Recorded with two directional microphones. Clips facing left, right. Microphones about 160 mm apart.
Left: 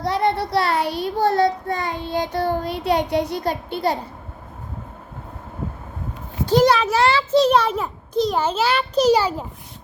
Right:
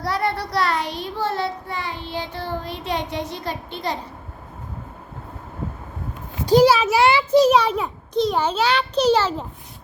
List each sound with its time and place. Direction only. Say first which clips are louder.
0.0 s a child's voice: left 3 dB; 25° left (ahead or behind)
0.9 s a child's voice: left 5 dB; 10° left (ahead or behind)
1.1 s child singing: left 7 dB; 40° left (ahead or behind)
2.6 s a child's voice: left 6 dB; 10° left (ahead or behind)
6.4 s a child's voice: right 2 dB; 10° right (ahead or behind); by 9.5 s 10° left (ahead or behind)